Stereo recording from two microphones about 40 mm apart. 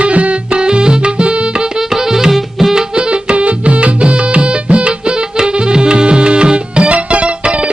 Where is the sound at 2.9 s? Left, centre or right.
Right.